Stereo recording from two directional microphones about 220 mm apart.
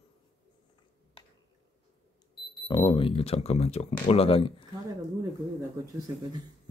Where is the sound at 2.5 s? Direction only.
20° left (ahead or behind).